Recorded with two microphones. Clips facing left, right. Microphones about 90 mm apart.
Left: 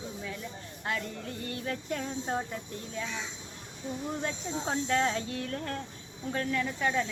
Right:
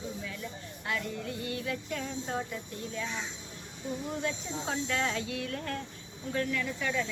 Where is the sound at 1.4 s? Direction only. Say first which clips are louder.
Left 3 dB; 40° left (ahead or behind).